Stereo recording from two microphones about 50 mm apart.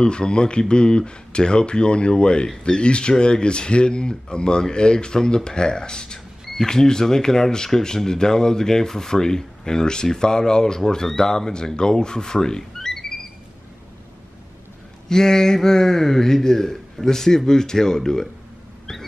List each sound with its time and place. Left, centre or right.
0.0 s speech: centre
15.0 s speech: centre